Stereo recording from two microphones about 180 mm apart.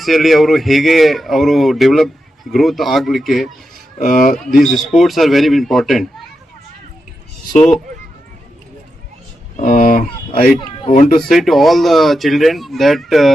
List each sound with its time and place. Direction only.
0.0 s speech: centre (ahead or behind)
4.0 s speech: 50° left (ahead or behind)
4.5 s speech: centre (ahead or behind)
9.6 s speech: 50° left (ahead or behind)
11.2 s speech: centre (ahead or behind)